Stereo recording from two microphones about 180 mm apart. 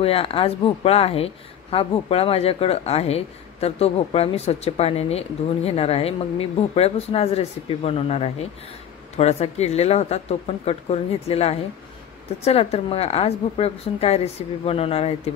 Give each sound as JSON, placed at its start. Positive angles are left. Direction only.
{"t": 0.0, "sound": "speech", "side_deg": 30}